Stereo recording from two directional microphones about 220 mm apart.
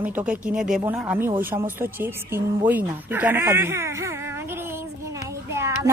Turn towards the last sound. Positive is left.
turn(degrees=-10)  # may be behind; listen again after turning